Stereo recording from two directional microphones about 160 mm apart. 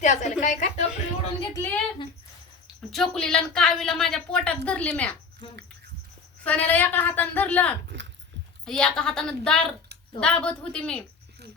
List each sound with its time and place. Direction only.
0.0 s a sound: 50° left (ahead or behind)
1.5 s a woman's voice: 10° left (ahead or behind)
2.9 s speech: 5° left (ahead or behind)
6.4 s a woman's voice: 10° left (ahead or behind)